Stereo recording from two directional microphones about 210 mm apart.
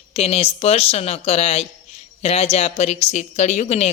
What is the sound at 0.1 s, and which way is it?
A woman's voice, 30° left (ahead or behind).